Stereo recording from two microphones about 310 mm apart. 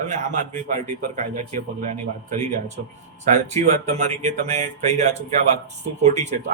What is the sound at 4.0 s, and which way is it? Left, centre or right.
Speech, right.